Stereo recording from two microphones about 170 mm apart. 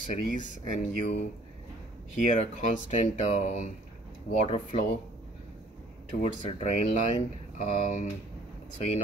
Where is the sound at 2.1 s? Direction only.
50° left (ahead or behind).